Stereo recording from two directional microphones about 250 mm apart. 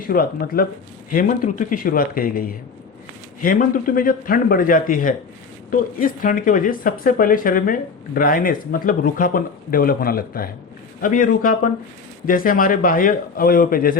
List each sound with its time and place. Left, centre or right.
0.1 s speech: left